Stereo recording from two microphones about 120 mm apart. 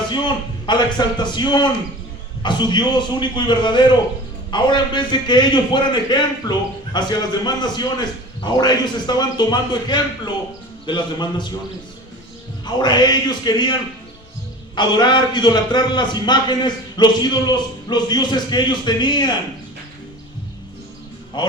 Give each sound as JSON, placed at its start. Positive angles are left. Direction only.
{"t": 0.6, "sound": "a man's voice", "side_deg": 35}
{"t": 12.6, "sound": "a man's voice", "side_deg": 35}
{"t": 14.8, "sound": "a man's voice", "side_deg": 40}
{"t": 21.3, "sound": "a man's voice", "side_deg": 40}